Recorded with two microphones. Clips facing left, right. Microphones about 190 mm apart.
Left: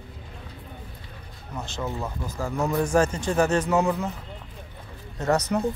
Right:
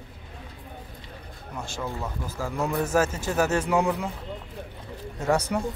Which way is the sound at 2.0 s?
5° right (ahead or behind).